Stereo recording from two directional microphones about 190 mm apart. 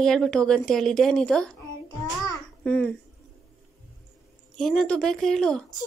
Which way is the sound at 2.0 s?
20° left (ahead or behind).